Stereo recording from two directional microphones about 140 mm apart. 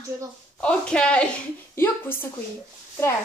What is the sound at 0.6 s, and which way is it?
Speech, 5° left (ahead or behind).